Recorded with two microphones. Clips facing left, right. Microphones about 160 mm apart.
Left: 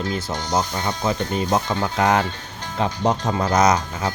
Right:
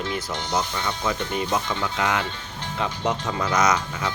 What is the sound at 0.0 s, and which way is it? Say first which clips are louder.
Speech: left 3 dB; 40° left (ahead or behind).